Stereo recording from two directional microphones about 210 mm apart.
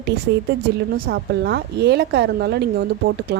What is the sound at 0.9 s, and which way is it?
A woman's voice, 45° right (ahead or behind).